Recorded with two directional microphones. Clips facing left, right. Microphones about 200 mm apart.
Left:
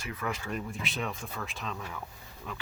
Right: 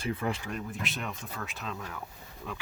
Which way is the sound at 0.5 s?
Centre (ahead or behind).